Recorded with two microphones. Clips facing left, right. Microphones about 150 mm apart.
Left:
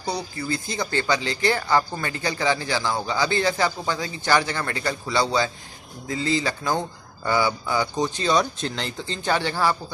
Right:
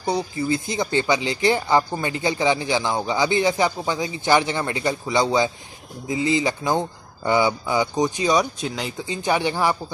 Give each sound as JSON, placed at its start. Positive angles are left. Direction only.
{"t": 0.0, "sound": "speech", "side_deg": -20}